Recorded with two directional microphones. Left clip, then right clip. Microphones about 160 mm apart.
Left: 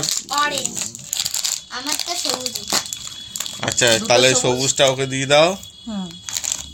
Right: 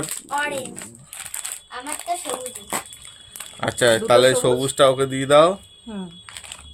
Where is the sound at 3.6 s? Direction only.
30° right (ahead or behind).